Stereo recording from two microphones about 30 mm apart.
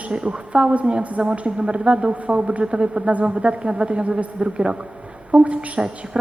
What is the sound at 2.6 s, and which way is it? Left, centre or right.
Speech, right.